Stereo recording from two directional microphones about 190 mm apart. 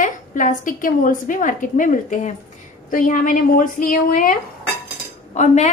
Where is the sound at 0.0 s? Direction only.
45° left (ahead or behind).